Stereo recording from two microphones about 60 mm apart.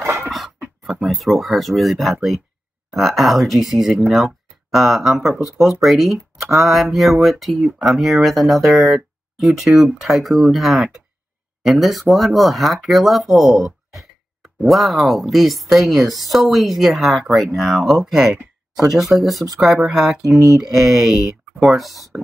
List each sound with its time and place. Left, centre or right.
0.0 s a sound: right
0.8 s speech: centre
20.2 s speech: right
20.5 s speech: centre